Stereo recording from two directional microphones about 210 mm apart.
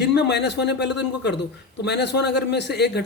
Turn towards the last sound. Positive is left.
turn(degrees=50)  # may be behind; listen again after turning